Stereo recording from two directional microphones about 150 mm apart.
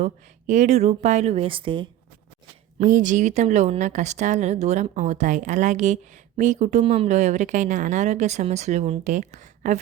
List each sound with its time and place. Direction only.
0.0 s speech: 50° right (ahead or behind); by 1.9 s 35° right (ahead or behind)
2.7 s speech: 60° right (ahead or behind)